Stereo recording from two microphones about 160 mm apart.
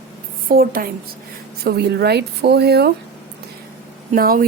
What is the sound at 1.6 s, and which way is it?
Speech, 90° right.